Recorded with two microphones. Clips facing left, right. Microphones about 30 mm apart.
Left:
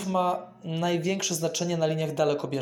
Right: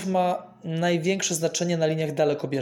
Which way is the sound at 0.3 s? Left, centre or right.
Right.